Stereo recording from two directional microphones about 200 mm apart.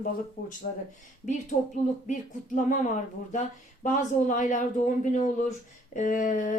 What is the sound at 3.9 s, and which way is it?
Speech, 40° left (ahead or behind).